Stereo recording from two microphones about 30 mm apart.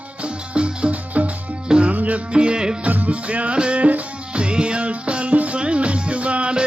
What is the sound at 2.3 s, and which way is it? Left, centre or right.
Music, right.